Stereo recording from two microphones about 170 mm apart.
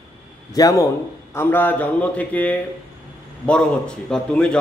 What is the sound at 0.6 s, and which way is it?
A man's voice, 20° left (ahead or behind).